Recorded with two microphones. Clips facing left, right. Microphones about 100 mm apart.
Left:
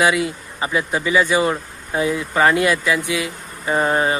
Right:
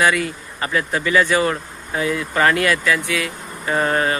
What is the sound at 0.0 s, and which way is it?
Speech, 15° left (ahead or behind).